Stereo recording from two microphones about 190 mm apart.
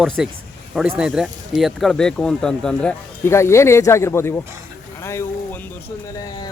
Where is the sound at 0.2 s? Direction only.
5° right (ahead or behind); by 4.4 s 15° left (ahead or behind).